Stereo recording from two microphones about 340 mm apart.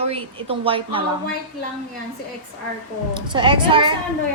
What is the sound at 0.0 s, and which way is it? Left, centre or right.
A woman's voice, centre.